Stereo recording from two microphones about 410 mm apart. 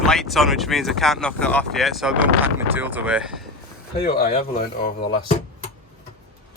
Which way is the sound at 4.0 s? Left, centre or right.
Centre.